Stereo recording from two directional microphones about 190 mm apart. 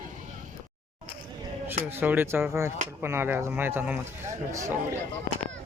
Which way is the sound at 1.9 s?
10° right (ahead or behind).